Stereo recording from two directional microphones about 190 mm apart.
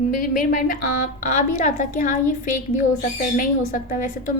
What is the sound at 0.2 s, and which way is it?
A woman's voice, 45° left (ahead or behind).